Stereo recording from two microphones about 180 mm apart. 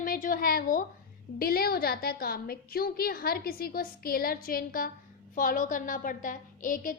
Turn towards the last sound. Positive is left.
turn(degrees=50)  # may be behind; listen again after turning